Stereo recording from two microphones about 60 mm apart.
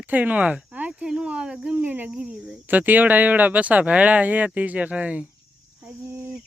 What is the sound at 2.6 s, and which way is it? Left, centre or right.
Speech, right.